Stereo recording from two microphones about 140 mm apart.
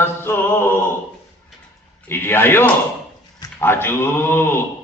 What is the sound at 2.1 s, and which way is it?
A man's voice, 15° left (ahead or behind).